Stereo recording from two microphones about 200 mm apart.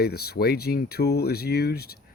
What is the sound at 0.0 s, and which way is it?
Speech, 50° left (ahead or behind).